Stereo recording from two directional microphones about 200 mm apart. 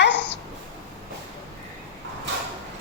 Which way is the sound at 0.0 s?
60° left (ahead or behind).